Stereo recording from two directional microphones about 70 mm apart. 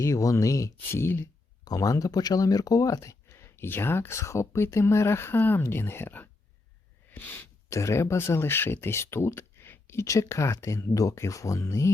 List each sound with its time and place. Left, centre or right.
0.0 s speech: left
1.6 s speech: left
7.1 s sneeze: left
7.7 s speech: left